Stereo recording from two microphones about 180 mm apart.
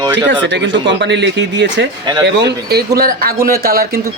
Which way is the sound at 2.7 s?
55° right (ahead or behind).